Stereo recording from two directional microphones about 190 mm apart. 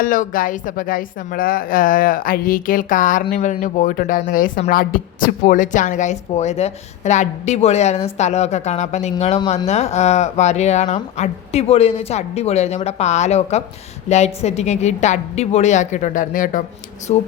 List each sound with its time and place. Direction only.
0.0 s a woman's voice: 45° left (ahead or behind)